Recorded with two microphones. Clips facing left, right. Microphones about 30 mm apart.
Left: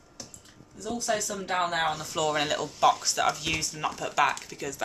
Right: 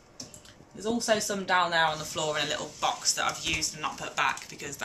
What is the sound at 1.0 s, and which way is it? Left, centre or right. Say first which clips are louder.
Speech: even; right.